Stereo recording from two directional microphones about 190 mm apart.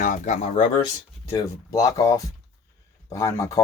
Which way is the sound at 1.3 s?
20° left (ahead or behind).